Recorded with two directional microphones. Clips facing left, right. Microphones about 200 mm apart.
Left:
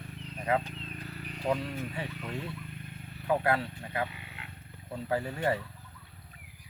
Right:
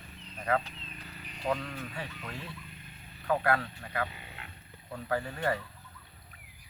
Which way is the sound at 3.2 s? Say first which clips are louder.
Left 1 dB; 20° left (ahead or behind).